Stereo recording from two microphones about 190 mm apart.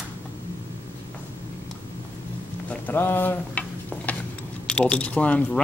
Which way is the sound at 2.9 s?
10° left (ahead or behind).